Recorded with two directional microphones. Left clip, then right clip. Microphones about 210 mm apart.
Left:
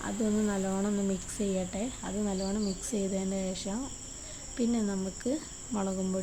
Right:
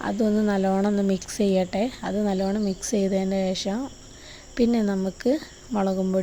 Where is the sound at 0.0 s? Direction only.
30° right (ahead or behind).